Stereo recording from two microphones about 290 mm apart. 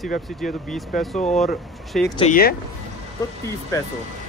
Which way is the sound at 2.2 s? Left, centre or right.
Left.